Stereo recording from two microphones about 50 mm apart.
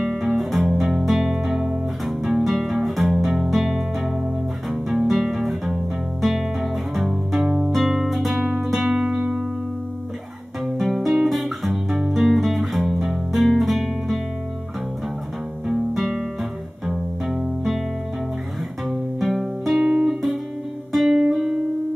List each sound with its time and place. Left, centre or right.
0.0 s music: centre; by 9.4 s right
10.6 s music: centre
15.6 s music: centre
18.9 s music: centre
19.8 s music: centre